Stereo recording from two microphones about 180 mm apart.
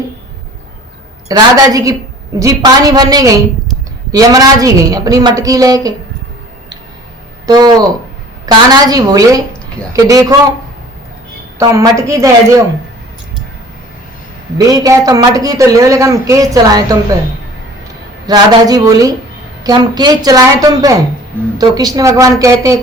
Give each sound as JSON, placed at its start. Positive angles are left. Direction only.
{"t": 1.3, "sound": "speech", "side_deg": -20}
{"t": 7.4, "sound": "speech", "side_deg": -20}
{"t": 11.7, "sound": "a woman's voice", "side_deg": -15}
{"t": 14.7, "sound": "speech", "side_deg": -20}
{"t": 18.3, "sound": "speech", "side_deg": -20}